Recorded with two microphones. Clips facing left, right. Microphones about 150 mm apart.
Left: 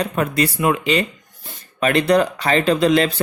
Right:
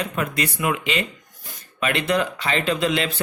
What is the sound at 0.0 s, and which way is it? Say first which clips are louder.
Speech: left 5 dB; 35° left (ahead or behind).